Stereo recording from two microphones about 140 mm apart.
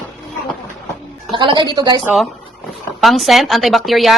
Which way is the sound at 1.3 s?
35° right (ahead or behind).